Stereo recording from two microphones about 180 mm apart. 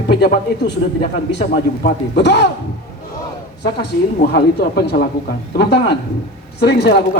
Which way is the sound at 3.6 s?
65° left (ahead or behind).